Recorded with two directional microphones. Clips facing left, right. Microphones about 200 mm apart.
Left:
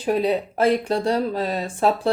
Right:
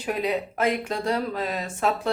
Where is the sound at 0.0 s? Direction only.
35° left (ahead or behind).